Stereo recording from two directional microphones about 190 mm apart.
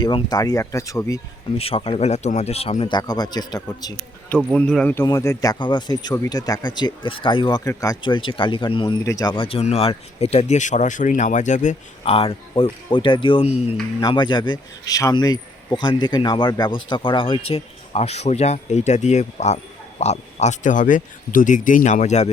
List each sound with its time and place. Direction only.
0.0 s speech: 20° left (ahead or behind)
1.5 s speech: 30° left (ahead or behind)
4.5 s speech: 5° left (ahead or behind); by 22.3 s 35° left (ahead or behind)